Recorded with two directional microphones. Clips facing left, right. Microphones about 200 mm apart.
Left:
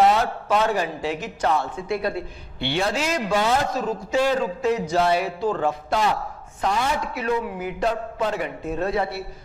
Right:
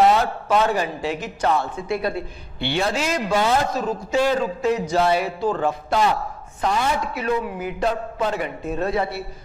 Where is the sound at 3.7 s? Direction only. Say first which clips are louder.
Right 1 dB; 15° right (ahead or behind).